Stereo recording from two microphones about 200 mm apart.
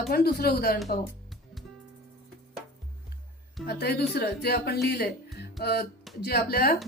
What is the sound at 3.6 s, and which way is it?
A woman's voice, 55° left (ahead or behind).